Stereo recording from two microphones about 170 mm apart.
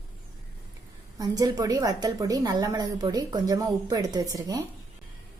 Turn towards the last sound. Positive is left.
turn(degrees=-20)  # may be behind; listen again after turning